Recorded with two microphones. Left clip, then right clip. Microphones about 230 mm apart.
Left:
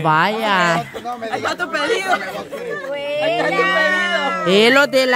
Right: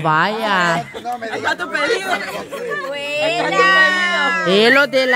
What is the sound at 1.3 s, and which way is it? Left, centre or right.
Speech, centre.